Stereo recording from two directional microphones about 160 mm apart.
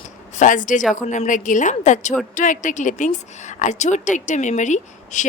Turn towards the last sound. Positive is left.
turn(degrees=50)  # may be behind; listen again after turning